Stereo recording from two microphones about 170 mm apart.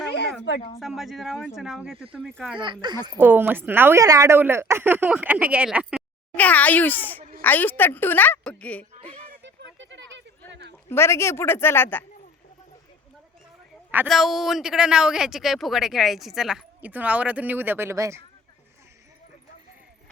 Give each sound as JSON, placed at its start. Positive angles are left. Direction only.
{"t": 0.0, "sound": "a sound", "side_deg": 85}
{"t": 0.8, "sound": "speech", "side_deg": 0}
{"t": 2.6, "sound": "speech", "side_deg": -25}
{"t": 3.2, "sound": "a woman's voice", "side_deg": -10}
{"t": 6.3, "sound": "a woman's voice", "side_deg": 10}
{"t": 9.4, "sound": "a sound", "side_deg": -90}
{"t": 10.8, "sound": "a woman's voice", "side_deg": 15}
{"t": 14.1, "sound": "speech", "side_deg": 0}